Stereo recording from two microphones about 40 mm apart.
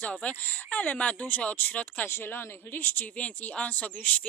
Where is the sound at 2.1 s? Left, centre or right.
Left.